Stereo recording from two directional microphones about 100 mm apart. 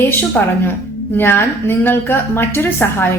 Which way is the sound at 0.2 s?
20° left (ahead or behind).